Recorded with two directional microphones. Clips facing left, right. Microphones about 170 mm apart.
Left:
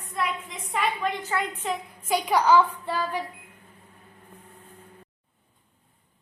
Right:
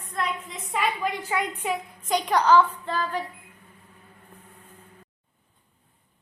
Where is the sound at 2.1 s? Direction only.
10° left (ahead or behind).